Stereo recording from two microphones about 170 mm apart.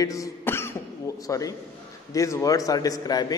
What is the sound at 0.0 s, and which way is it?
Throat clearing, 20° left (ahead or behind).